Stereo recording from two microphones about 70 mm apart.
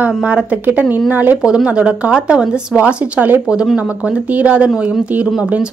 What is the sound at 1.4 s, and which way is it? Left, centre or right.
A woman's voice, centre.